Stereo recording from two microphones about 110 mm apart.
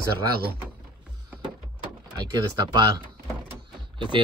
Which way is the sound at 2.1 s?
35° right (ahead or behind).